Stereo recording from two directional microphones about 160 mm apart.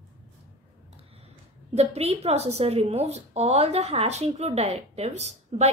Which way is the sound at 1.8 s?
40° right (ahead or behind).